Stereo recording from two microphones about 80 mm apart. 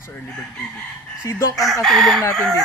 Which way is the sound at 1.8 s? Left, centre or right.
Centre.